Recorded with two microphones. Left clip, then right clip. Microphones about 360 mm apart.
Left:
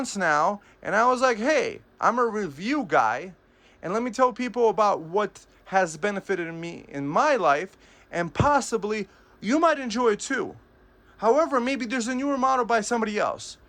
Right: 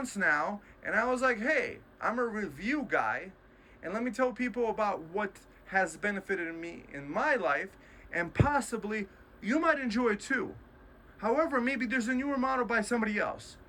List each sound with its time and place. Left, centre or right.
0.0 s speech: centre